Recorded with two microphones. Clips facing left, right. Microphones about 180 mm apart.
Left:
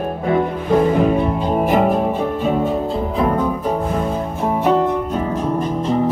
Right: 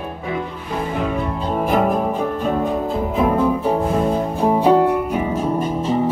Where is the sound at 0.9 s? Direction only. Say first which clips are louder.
Left 6 dB; 35° left (ahead or behind).